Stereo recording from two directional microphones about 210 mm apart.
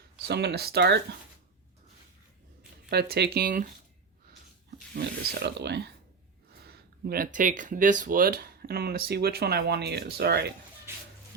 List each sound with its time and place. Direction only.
0.3 s speech: 50° right (ahead or behind)
2.9 s speech: 50° right (ahead or behind)
4.9 s speech: 50° right (ahead or behind)